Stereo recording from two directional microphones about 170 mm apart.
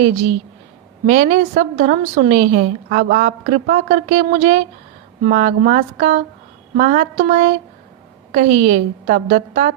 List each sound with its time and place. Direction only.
1.0 s a woman's voice: 45° right (ahead or behind)
2.6 s a woman's voice: 60° right (ahead or behind)